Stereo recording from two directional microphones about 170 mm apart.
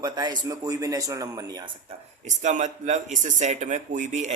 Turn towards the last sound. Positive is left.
turn(degrees=-45)  # may be behind; listen again after turning